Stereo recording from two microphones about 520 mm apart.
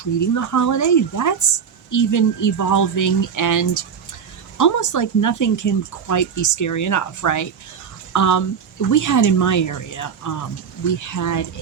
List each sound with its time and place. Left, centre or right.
0.2 s speech: left